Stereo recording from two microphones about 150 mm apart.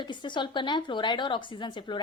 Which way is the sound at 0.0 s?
30° left (ahead or behind).